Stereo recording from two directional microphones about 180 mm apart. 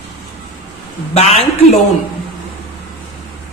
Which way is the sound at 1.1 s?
40° left (ahead or behind).